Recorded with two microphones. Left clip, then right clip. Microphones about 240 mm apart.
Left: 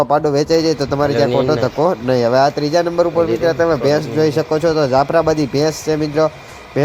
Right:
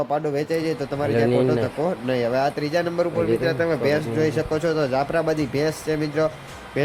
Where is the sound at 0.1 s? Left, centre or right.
Left.